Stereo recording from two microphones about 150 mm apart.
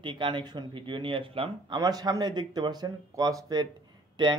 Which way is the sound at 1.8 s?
25° right (ahead or behind).